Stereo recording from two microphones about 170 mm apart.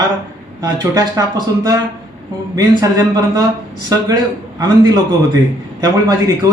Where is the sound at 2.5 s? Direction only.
20° right (ahead or behind).